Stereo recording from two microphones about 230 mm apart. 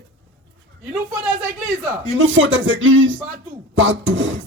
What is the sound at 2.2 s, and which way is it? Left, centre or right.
Speech, right.